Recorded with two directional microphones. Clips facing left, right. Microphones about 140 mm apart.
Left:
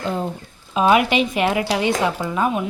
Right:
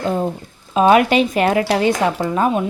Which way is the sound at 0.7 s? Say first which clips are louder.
Right 4 dB; 40° right (ahead or behind).